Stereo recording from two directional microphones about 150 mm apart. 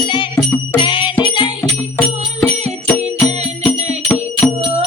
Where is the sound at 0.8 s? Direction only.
30° left (ahead or behind).